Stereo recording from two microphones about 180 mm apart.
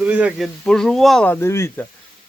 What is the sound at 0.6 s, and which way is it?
Speech, 5° left (ahead or behind).